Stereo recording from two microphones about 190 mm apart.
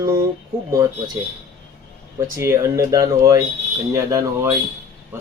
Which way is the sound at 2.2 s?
15° right (ahead or behind).